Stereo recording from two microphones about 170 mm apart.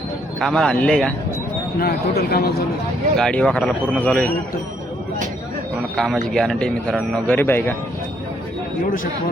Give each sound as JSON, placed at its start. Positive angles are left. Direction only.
{"t": 0.3, "sound": "speech", "side_deg": 5}
{"t": 1.8, "sound": "speech", "side_deg": 65}
{"t": 3.2, "sound": "speech", "side_deg": 5}
{"t": 6.2, "sound": "speech", "side_deg": 5}